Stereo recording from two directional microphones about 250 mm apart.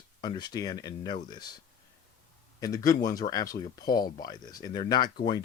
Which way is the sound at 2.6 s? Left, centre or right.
Centre.